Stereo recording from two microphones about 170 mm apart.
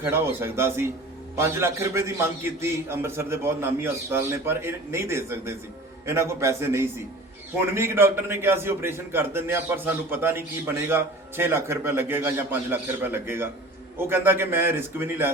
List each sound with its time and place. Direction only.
0.0 s a man's voice: 15° right (ahead or behind)